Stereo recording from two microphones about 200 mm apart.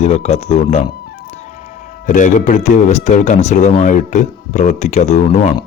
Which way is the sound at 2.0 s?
40° left (ahead or behind).